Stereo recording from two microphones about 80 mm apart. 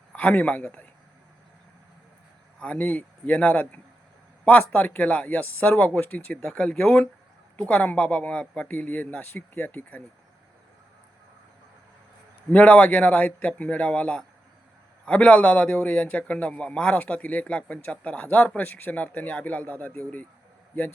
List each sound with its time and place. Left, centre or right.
0.1 s a man's voice: centre
2.6 s a man's voice: centre
12.5 s a man's voice: centre